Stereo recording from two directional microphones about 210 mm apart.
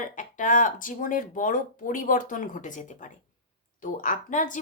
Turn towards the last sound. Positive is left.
turn(degrees=35)  # may be behind; listen again after turning